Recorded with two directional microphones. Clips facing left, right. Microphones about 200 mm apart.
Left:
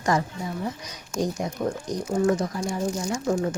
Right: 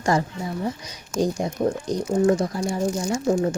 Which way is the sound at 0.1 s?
30° right (ahead or behind).